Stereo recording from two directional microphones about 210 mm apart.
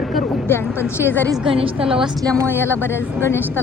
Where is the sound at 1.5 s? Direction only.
25° right (ahead or behind).